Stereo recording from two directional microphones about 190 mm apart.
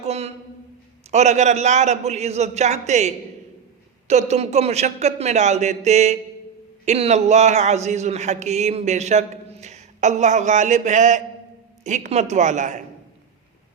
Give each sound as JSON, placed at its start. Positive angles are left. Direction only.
{"t": 0.0, "sound": "a sound", "side_deg": -35}
{"t": 1.1, "sound": "speech", "side_deg": -35}
{"t": 4.1, "sound": "speech", "side_deg": -35}